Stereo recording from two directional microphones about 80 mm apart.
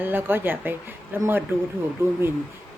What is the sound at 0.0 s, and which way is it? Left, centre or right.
A woman's voice, right.